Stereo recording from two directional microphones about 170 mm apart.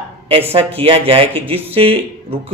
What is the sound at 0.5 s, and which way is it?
A man's voice, 35° right (ahead or behind).